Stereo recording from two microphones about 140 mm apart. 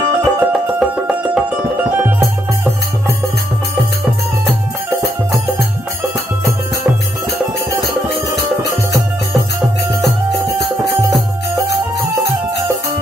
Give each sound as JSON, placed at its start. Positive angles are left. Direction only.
{"t": 0.2, "sound": "music", "side_deg": -5}
{"t": 2.0, "sound": "music", "side_deg": -15}